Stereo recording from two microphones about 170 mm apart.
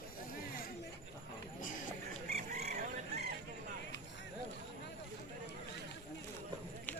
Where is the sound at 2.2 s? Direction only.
40° right (ahead or behind).